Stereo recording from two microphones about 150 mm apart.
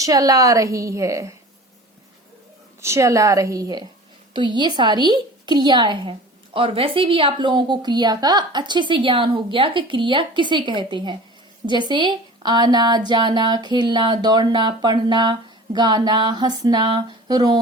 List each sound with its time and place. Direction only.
0.0 s a woman's voice: 25° right (ahead or behind)
2.8 s a woman's voice: 20° right (ahead or behind)